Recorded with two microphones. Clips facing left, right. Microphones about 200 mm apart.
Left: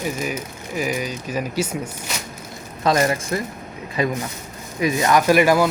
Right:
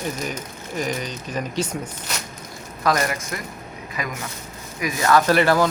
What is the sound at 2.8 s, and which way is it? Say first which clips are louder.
Speech: left 3 dB; 25° left (ahead or behind).